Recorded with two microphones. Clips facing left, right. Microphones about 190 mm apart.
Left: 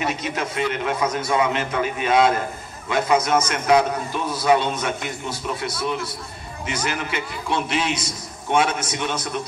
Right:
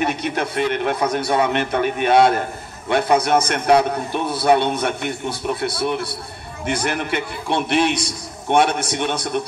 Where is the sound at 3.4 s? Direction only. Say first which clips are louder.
Right 2 dB; 60° right (ahead or behind).